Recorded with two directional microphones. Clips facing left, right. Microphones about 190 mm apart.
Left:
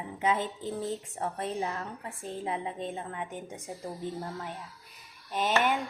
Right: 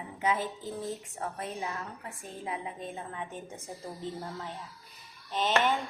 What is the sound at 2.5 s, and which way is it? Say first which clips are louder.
Speech: left 2 dB; 25° left (ahead or behind).